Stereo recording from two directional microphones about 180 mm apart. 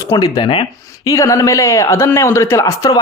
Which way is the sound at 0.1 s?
25° left (ahead or behind).